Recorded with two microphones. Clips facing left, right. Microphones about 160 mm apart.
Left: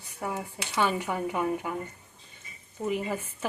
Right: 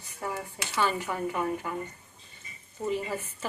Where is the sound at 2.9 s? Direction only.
15° left (ahead or behind).